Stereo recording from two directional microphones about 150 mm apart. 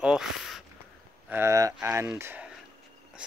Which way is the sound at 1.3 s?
20° right (ahead or behind).